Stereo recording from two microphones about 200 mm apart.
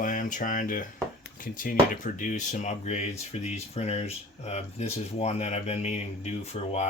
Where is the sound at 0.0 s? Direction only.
40° left (ahead or behind).